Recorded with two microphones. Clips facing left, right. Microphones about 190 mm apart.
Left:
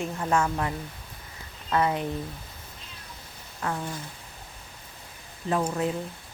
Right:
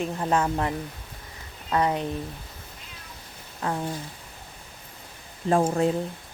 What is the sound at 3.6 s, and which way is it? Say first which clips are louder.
Speech: right 2 dB; 25° right (ahead or behind).